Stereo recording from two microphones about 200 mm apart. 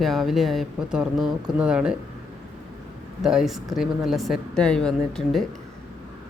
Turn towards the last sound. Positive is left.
turn(degrees=0)  # may be behind; listen again after turning